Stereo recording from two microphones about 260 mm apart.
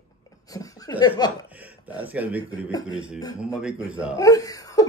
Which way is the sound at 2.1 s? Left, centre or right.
Centre.